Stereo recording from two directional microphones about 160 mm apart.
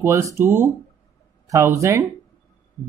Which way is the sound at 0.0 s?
15° right (ahead or behind).